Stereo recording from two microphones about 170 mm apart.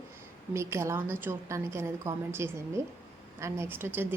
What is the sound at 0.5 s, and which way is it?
A woman's voice, 15° right (ahead or behind).